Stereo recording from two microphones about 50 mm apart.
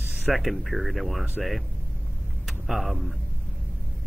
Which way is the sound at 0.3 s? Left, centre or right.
Centre.